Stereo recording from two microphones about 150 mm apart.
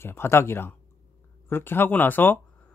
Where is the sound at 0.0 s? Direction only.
15° left (ahead or behind).